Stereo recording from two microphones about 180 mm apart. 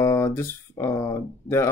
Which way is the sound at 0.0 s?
15° left (ahead or behind).